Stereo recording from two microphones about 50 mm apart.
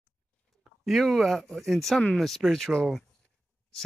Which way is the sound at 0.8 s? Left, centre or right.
Centre.